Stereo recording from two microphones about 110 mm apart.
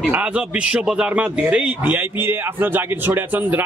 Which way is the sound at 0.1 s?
10° right (ahead or behind).